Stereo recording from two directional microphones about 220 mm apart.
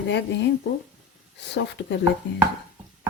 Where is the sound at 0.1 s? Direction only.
55° left (ahead or behind).